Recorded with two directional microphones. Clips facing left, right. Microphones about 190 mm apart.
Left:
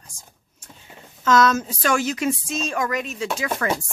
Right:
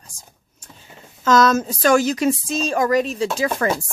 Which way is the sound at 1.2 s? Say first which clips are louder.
Right 2 dB; 40° right (ahead or behind).